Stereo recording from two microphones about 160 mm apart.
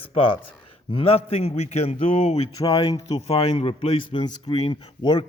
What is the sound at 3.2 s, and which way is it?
A man's voice, 40° left (ahead or behind).